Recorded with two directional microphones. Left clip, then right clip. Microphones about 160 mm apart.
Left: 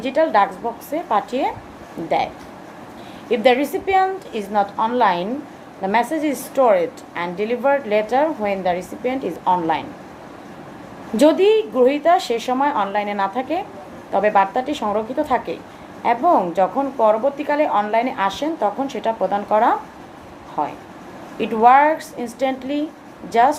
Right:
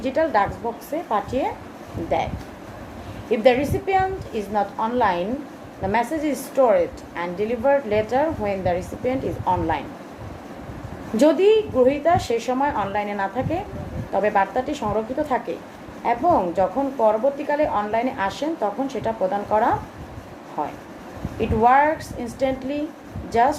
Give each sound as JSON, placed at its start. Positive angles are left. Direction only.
{"t": 0.0, "sound": "a woman's voice", "side_deg": 45}
{"t": 11.2, "sound": "a woman's voice", "side_deg": 45}